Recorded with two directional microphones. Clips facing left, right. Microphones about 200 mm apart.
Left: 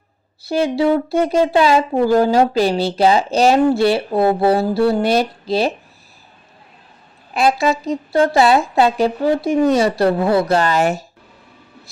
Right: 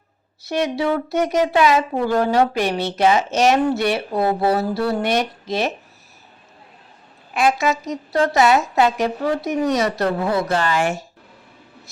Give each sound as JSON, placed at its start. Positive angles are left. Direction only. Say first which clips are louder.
{"t": 0.4, "sound": "speech", "louder": "left 4 dB", "side_deg": 30}
{"t": 7.3, "sound": "speech", "louder": "left 3 dB", "side_deg": 35}